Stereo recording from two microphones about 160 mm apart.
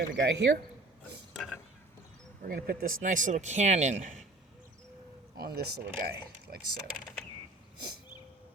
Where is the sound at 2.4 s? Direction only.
70° right (ahead or behind); by 4.1 s 45° right (ahead or behind).